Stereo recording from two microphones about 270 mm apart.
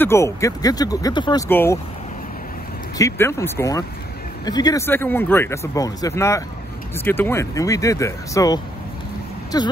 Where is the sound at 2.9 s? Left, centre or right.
Centre.